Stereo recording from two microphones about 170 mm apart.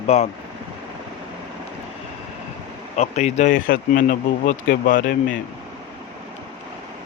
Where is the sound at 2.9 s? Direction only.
40° left (ahead or behind).